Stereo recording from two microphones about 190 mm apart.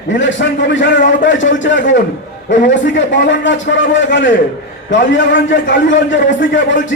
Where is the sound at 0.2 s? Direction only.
75° left (ahead or behind).